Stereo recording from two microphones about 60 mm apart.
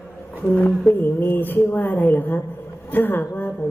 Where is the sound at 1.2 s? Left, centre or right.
Left.